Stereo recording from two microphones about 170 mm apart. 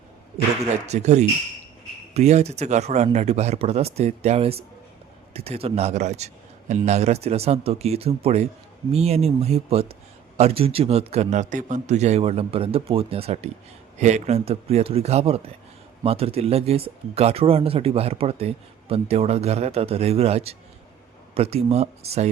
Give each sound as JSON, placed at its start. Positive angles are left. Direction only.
{"t": 0.6, "sound": "speech", "side_deg": -40}